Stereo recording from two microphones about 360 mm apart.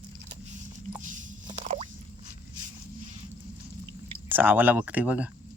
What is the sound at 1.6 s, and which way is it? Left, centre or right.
Drip, centre.